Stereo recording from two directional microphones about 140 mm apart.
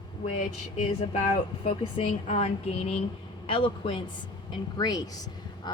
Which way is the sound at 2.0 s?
45° left (ahead or behind).